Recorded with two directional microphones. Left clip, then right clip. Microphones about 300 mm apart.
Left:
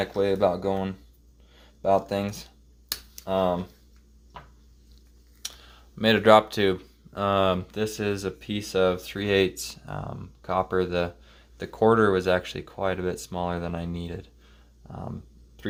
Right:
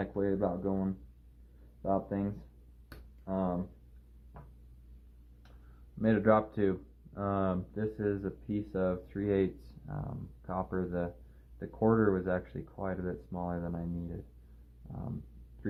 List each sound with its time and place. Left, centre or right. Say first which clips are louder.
0.0 s speech: left 10 dB; left
2.9 s finger snapping: left 11 dB; left
6.0 s speech: left 10 dB; left